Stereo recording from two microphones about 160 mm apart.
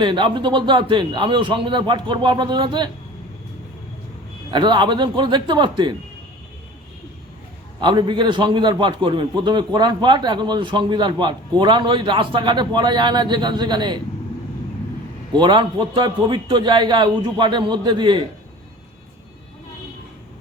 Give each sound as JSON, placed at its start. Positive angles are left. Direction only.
{"t": 0.0, "sound": "a man's voice", "side_deg": -30}
{"t": 4.5, "sound": "a man's voice", "side_deg": -30}
{"t": 7.8, "sound": "a man's voice", "side_deg": -30}
{"t": 15.3, "sound": "a man's voice", "side_deg": -30}